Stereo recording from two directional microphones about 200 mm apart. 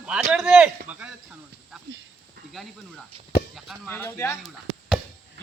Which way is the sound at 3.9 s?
10° left (ahead or behind).